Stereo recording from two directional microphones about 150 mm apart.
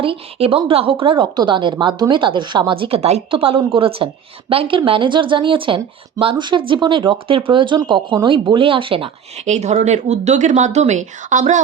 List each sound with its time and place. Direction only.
0.0 s a woman's voice: 40° right (ahead or behind)
9.5 s speech: 50° right (ahead or behind)